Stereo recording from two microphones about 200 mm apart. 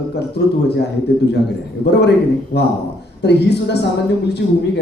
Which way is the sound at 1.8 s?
55° left (ahead or behind).